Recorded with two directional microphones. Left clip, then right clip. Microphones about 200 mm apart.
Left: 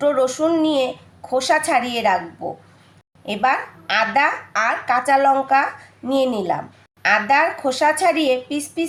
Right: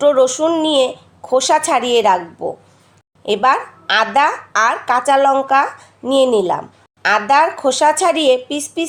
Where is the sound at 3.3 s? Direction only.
35° right (ahead or behind).